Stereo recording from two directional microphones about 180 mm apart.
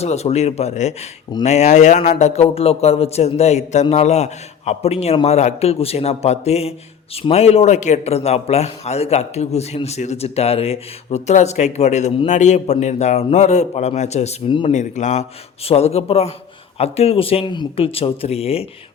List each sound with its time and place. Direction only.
0.0 s speech: 35° left (ahead or behind)
14.7 s speech: 40° left (ahead or behind)